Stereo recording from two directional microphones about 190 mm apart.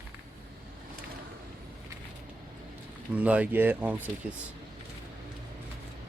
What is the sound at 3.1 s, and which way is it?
Speech, 10° right (ahead or behind).